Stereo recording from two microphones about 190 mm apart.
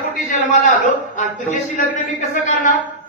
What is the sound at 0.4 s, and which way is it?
A woman's voice, 40° left (ahead or behind).